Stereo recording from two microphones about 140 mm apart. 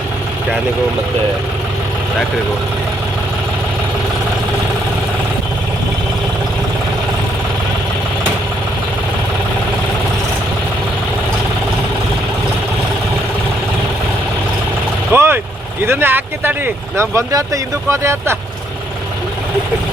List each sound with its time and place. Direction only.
15.1 s vehicle: 15° right (ahead or behind)
15.8 s speech: 15° right (ahead or behind)